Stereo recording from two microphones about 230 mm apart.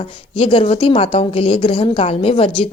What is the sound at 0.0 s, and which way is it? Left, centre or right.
A woman's voice, left.